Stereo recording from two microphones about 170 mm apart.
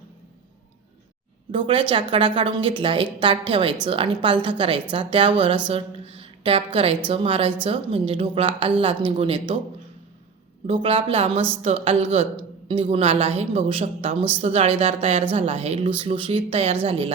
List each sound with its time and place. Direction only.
1.5 s a woman's voice: 30° right (ahead or behind)
10.7 s a woman's voice: 35° right (ahead or behind)